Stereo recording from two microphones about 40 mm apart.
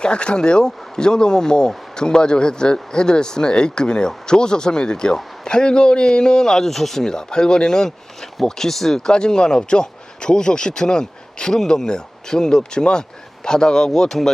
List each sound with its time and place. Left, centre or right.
0.0 s a man's voice: left